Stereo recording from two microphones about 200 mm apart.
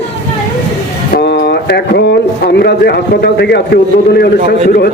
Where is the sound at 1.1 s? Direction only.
55° left (ahead or behind).